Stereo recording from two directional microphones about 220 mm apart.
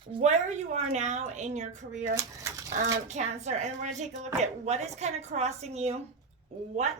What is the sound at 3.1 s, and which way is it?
A woman's voice, 30° right (ahead or behind).